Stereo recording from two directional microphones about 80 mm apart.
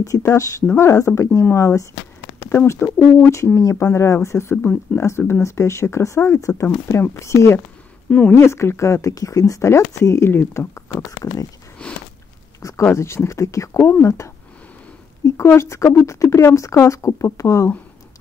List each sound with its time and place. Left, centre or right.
0.3 s speech: left
8.1 s speech: centre
8.4 s speech: left
11.8 s speech: centre
12.9 s speech: left